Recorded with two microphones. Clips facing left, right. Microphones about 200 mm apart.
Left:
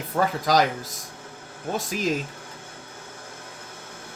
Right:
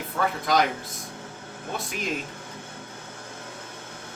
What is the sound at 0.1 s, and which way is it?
Speech, 45° left (ahead or behind).